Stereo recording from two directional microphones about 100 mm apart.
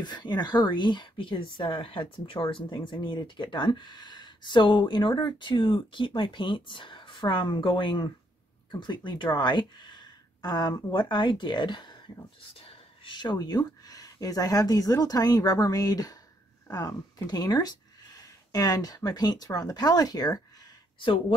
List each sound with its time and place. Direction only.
0.0 s speech: 45° left (ahead or behind)
11.0 s speech: 50° left (ahead or behind)
12.4 s speech: 65° left (ahead or behind); by 20.4 s 40° left (ahead or behind)